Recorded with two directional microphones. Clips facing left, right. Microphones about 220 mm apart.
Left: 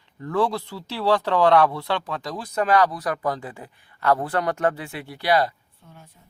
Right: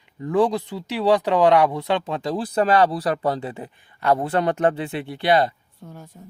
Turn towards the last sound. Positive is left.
turn(degrees=-45)  # may be behind; listen again after turning